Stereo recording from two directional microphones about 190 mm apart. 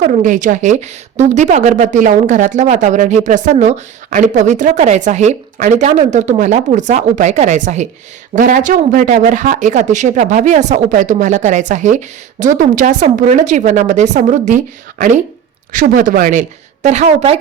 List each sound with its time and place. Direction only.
0.0 s speech: 40° right (ahead or behind)